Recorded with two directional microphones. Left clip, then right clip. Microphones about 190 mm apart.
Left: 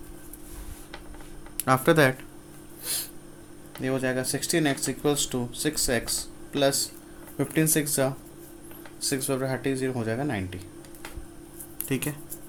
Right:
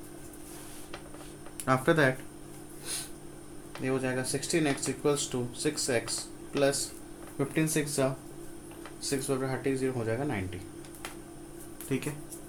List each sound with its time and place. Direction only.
1.6 s speech: 50° left (ahead or behind)
7.3 s speech: 70° left (ahead or behind)
11.9 s speech: 65° left (ahead or behind)